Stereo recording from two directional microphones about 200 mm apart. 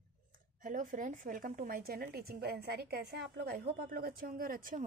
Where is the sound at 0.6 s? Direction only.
40° right (ahead or behind).